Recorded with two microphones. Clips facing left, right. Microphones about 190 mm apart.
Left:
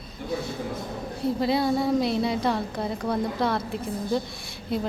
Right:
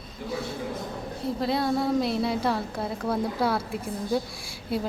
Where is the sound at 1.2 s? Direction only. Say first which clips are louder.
Left 3 dB; centre (ahead or behind).